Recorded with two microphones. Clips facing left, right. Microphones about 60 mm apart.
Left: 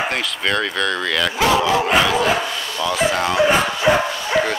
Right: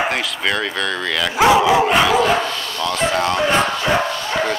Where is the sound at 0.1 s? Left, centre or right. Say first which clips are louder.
Even; centre.